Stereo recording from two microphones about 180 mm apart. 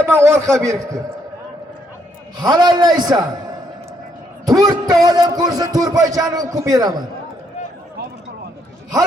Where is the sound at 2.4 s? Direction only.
25° right (ahead or behind).